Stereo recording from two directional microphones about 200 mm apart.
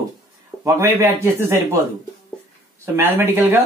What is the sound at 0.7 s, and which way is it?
A man's voice, 10° right (ahead or behind).